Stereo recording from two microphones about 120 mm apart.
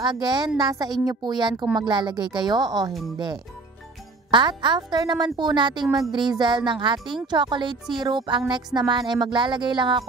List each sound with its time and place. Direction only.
0.0 s speech: 35° right (ahead or behind)
4.3 s speech: 40° right (ahead or behind)